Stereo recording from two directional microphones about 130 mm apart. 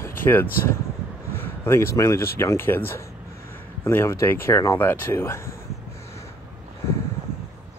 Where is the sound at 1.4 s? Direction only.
20° left (ahead or behind).